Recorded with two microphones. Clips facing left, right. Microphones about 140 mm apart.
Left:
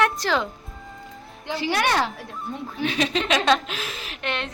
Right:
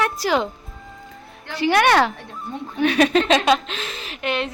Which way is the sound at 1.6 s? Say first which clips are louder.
Right 7 dB; 70° right (ahead or behind).